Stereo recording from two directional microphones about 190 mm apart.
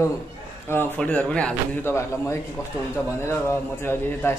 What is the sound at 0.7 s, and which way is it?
A man's voice, 10° left (ahead or behind).